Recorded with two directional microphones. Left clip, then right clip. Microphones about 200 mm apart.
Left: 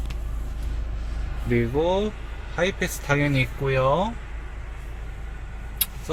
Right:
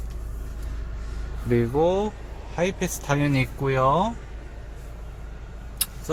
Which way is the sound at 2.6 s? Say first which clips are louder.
Left 1 dB; centre (ahead or behind).